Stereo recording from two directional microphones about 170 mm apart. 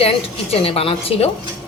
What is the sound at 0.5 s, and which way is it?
Speech, 35° left (ahead or behind).